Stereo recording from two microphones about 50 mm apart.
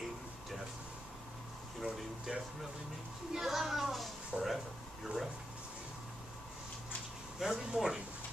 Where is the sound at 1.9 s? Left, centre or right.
Centre.